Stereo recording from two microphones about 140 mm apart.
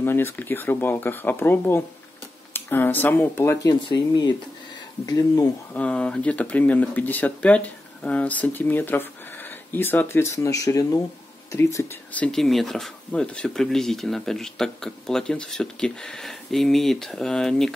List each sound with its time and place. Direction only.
0.0 s speech: 15° left (ahead or behind)
5.7 s speech: 10° left (ahead or behind)